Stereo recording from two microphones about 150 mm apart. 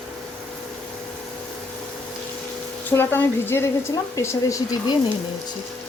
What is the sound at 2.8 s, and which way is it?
Speech, 15° left (ahead or behind).